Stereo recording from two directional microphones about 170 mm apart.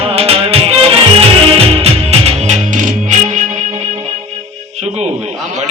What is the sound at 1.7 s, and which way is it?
Music, 35° right (ahead or behind).